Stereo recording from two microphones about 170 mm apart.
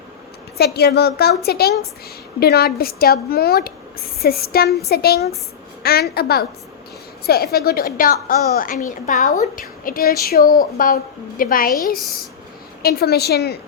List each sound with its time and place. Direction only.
0.5 s a woman's voice: 70° left (ahead or behind)
12.8 s a woman's voice: 65° left (ahead or behind)